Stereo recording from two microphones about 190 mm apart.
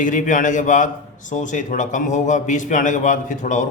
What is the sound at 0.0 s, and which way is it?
A man's voice, 40° left (ahead or behind).